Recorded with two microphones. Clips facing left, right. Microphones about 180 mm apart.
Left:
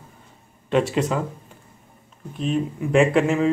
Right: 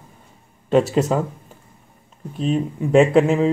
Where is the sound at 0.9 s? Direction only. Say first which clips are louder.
Right 4 dB; 40° right (ahead or behind).